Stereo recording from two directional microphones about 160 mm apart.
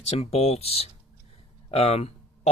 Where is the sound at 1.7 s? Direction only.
40° left (ahead or behind).